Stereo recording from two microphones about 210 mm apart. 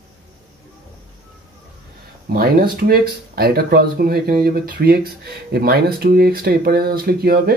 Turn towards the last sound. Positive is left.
turn(degrees=-45)  # may be behind; listen again after turning